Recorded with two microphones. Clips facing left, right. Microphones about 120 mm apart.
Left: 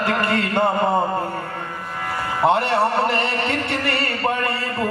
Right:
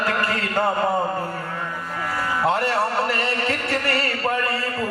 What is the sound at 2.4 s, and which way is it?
Music, 25° left (ahead or behind).